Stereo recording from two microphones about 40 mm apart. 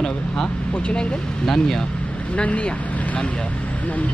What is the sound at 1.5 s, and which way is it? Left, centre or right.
Speech, centre.